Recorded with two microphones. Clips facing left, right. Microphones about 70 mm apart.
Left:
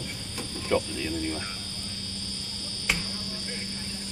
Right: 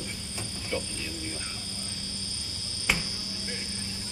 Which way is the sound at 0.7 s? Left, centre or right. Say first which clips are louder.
Left 8 dB; left.